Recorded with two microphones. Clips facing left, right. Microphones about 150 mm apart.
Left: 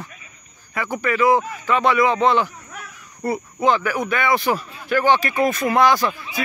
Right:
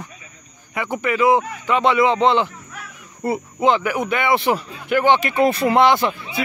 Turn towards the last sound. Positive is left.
turn(degrees=-25)  # may be behind; listen again after turning